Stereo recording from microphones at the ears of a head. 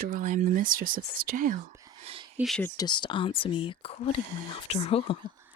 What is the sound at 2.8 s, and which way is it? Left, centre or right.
Speech, left.